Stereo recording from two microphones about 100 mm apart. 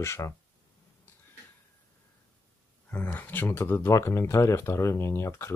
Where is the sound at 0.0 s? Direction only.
25° left (ahead or behind).